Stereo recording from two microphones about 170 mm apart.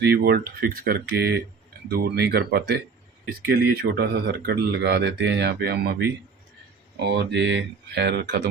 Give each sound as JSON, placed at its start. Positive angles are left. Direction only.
{"t": 0.0, "sound": "speech", "side_deg": -65}
{"t": 7.0, "sound": "speech", "side_deg": -85}